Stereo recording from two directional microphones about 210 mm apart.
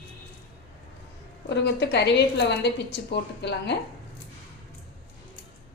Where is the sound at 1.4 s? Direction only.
55° left (ahead or behind).